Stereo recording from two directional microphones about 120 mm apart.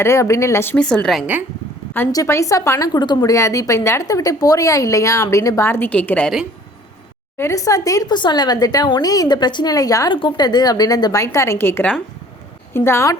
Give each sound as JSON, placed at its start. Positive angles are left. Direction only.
{"t": 0.0, "sound": "a woman's voice", "side_deg": 25}
{"t": 0.8, "sound": "a woman's voice", "side_deg": 5}
{"t": 2.2, "sound": "a woman's voice", "side_deg": 25}
{"t": 7.3, "sound": "speech", "side_deg": 25}
{"t": 10.1, "sound": "a woman's voice", "side_deg": 40}